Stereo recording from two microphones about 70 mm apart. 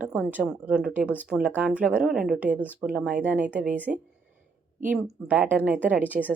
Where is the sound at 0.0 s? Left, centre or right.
Centre.